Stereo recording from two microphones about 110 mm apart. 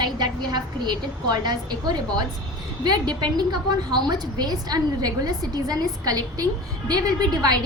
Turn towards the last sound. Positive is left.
turn(degrees=-35)  # may be behind; listen again after turning